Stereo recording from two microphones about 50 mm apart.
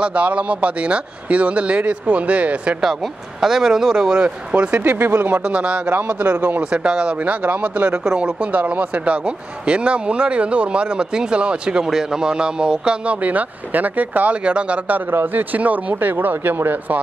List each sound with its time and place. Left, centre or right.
0.0 s speech: right
2.8 s speech: centre; by 4.7 s right
4.7 s speech: right
5.5 s speech: right
5.9 s a man's voice: right
6.7 s speech: centre
7.2 s speech: right
14.4 s speech: right
15.3 s a man's voice: right